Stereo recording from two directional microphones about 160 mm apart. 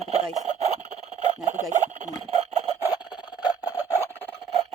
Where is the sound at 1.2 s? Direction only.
50° right (ahead or behind).